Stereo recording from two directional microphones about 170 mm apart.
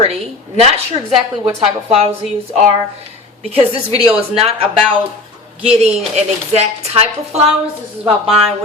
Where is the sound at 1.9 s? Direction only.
35° right (ahead or behind).